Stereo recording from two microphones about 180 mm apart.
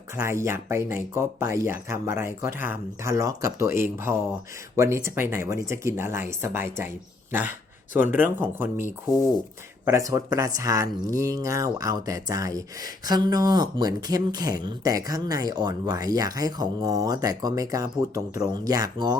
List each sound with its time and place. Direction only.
0.2 s speech: 15° right (ahead or behind)
9.8 s speech: 15° right (ahead or behind)